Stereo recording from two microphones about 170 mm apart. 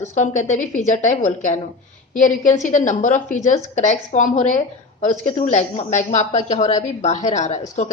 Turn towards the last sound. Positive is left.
turn(degrees=45)  # may be behind; listen again after turning